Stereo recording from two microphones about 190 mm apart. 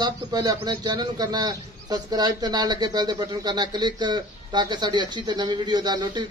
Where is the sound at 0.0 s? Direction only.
20° right (ahead or behind).